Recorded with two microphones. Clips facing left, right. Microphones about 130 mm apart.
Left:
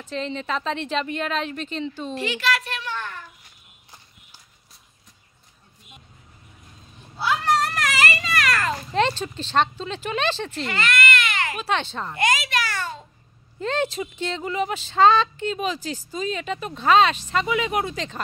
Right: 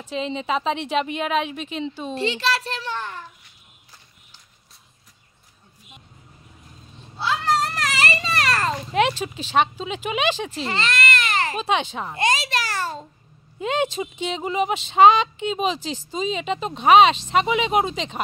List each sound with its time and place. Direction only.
0.0 s a woman's voice: 15° right (ahead or behind)
2.1 s a child's voice: 30° right (ahead or behind)
7.2 s a sound: 25° right (ahead or behind)
8.9 s a woman's voice: 10° right (ahead or behind)
10.6 s baby cry: 30° right (ahead or behind)
11.6 s a woman's voice: 15° right (ahead or behind)
12.2 s a sound: 30° right (ahead or behind)
13.6 s speech: 15° right (ahead or behind)